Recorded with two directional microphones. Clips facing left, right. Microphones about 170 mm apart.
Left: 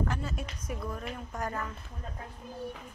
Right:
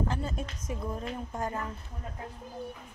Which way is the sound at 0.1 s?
30° right (ahead or behind).